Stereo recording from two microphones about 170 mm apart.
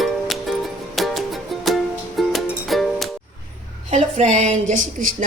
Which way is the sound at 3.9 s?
45° right (ahead or behind).